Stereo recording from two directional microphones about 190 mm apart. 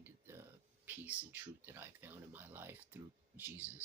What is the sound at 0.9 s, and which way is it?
Speech, 10° right (ahead or behind).